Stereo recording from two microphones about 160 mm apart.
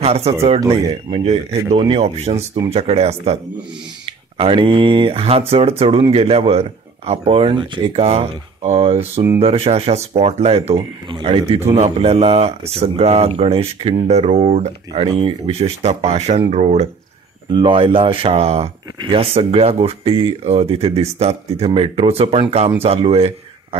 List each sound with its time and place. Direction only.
0.0 s speech: 40° right (ahead or behind)
15.0 s speech: 30° right (ahead or behind)
17.5 s speech: 30° right (ahead or behind)